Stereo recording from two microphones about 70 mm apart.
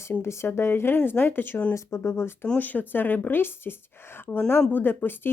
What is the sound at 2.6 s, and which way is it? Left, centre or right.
Speech, left.